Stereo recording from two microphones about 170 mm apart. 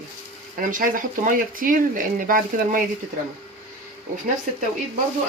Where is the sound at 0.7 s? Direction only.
50° right (ahead or behind).